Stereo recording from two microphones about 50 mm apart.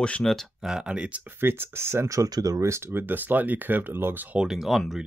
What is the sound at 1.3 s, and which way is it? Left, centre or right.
Speech, right.